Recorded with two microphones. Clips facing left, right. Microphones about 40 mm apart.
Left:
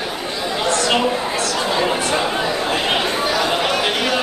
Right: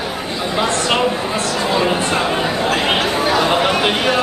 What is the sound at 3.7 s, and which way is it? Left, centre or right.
Speech, centre.